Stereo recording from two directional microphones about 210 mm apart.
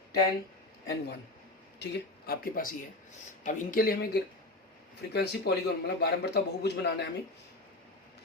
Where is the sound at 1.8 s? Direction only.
50° left (ahead or behind).